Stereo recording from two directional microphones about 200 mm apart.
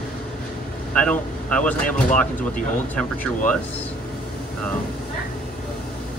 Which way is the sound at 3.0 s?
5° left (ahead or behind).